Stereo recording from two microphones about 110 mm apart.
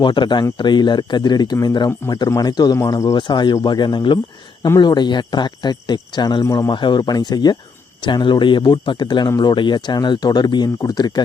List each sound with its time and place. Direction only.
0.0 s a man's voice: 45° left (ahead or behind)